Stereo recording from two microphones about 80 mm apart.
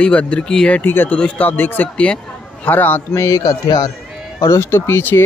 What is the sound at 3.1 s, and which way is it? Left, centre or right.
Speech, left.